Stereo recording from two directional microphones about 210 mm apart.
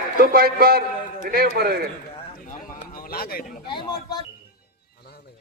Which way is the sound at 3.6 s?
20° left (ahead or behind).